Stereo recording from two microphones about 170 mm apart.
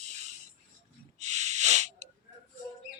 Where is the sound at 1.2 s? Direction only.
45° right (ahead or behind).